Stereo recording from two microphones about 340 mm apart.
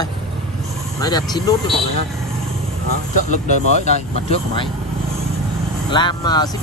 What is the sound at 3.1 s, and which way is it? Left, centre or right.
Speech, left.